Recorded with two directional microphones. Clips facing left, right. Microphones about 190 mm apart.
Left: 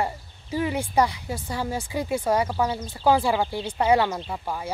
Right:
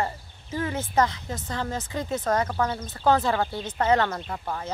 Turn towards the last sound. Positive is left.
turn(degrees=10)  # may be behind; listen again after turning